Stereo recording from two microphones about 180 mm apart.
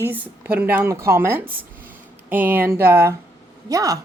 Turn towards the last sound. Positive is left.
turn(degrees=-20)  # may be behind; listen again after turning